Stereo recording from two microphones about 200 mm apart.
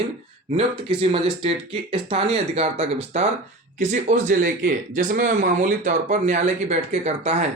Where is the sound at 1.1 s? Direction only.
30° right (ahead or behind).